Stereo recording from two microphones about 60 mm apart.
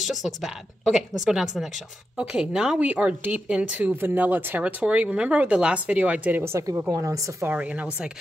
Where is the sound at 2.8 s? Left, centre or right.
Right.